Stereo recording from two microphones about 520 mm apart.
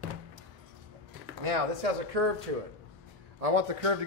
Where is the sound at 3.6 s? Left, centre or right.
Right.